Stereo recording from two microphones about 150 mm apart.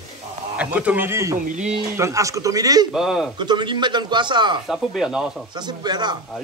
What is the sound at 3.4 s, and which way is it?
Speech, 30° right (ahead or behind).